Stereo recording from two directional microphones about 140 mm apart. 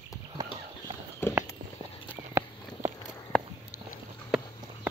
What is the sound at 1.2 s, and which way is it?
Walk, 15° left (ahead or behind).